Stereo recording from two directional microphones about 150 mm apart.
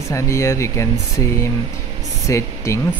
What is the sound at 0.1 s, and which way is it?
Speech, 20° left (ahead or behind).